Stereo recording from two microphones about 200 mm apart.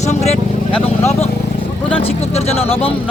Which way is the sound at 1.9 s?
30° left (ahead or behind).